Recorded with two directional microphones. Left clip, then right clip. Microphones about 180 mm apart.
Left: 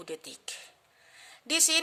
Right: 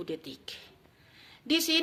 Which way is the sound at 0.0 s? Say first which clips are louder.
Right 2 dB; 65° left (ahead or behind).